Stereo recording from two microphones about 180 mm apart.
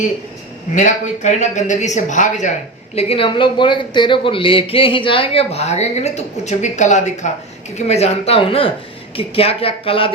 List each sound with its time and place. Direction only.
0.8 s speech: 40° left (ahead or behind)